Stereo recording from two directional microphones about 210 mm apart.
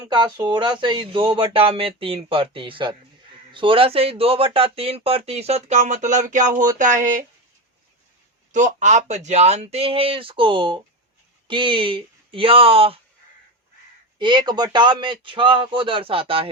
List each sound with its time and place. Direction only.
0.0 s speech: 20° right (ahead or behind); by 7.3 s 40° right (ahead or behind)
8.5 s speech: 35° right (ahead or behind)
14.2 s speech: 20° right (ahead or behind)